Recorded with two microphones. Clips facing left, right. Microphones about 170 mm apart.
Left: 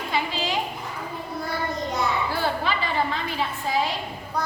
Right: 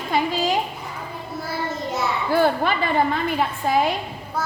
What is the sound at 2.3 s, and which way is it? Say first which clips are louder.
A woman's voice: right 7 dB; 50° right (ahead or behind).